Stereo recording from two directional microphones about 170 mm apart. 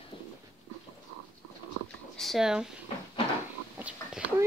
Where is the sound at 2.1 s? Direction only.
Centre (ahead or behind).